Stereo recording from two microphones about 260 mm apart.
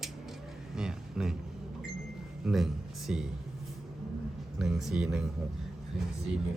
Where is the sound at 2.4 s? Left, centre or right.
Centre.